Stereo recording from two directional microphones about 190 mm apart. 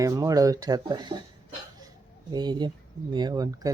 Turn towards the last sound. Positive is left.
turn(degrees=-20)  # may be behind; listen again after turning